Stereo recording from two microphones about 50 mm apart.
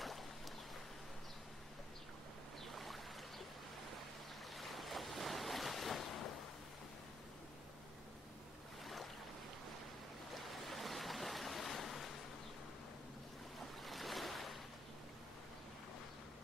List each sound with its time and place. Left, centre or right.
2.7 s boat: centre
4.6 s waves: centre
8.8 s boat: centre
10.3 s waves: centre
13.8 s waves: centre